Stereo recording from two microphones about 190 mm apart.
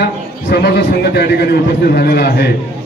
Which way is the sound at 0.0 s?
60° left (ahead or behind).